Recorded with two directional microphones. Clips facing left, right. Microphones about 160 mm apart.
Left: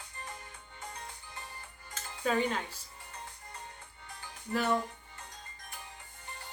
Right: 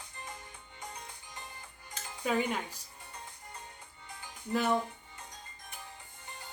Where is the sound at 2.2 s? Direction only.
15° right (ahead or behind).